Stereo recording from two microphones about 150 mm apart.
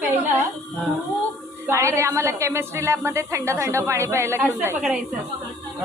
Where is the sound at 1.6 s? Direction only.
20° right (ahead or behind).